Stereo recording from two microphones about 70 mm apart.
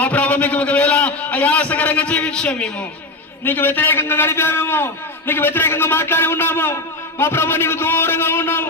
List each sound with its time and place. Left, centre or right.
0.0 s a man's voice: left
3.4 s a man's voice: left